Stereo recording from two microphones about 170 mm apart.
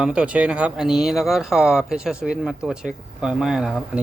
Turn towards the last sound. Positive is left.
turn(degrees=-5)  # may be behind; listen again after turning